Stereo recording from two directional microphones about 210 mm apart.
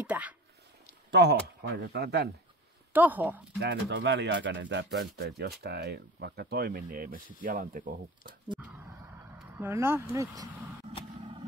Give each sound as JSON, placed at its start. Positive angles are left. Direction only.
{"t": 0.0, "sound": "speech", "side_deg": -5}
{"t": 1.1, "sound": "speech", "side_deg": -55}
{"t": 2.9, "sound": "speech", "side_deg": -10}
{"t": 3.5, "sound": "speech", "side_deg": -55}
{"t": 8.5, "sound": "speech", "side_deg": -5}